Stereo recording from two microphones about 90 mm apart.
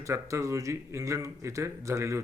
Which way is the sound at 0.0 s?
35° right (ahead or behind).